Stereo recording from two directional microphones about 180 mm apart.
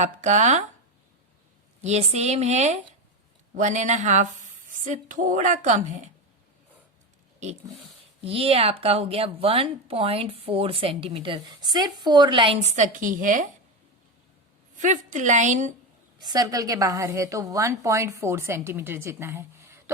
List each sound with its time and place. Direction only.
0.0 s a woman's voice: 40° right (ahead or behind)
1.8 s a woman's voice: 35° right (ahead or behind)
8.2 s a woman's voice: 30° right (ahead or behind)
14.8 s a woman's voice: 45° right (ahead or behind)
16.2 s a woman's voice: 20° right (ahead or behind)